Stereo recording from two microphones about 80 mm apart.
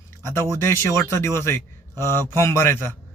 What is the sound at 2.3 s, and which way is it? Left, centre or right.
Speech, left.